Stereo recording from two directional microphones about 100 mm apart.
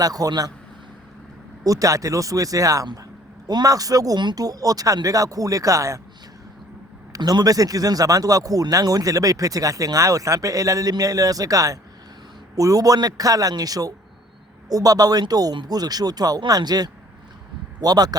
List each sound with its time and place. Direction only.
0.0 s speech: 40° right (ahead or behind)
1.6 s speech: 35° right (ahead or behind)
7.1 s speech: 40° right (ahead or behind)